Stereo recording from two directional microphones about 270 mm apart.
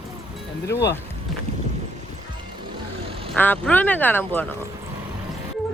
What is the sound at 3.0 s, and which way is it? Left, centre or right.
Quack, centre.